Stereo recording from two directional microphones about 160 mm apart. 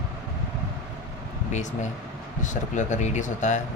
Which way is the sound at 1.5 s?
50° left (ahead or behind).